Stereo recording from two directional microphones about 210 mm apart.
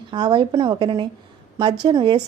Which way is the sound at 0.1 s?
20° right (ahead or behind).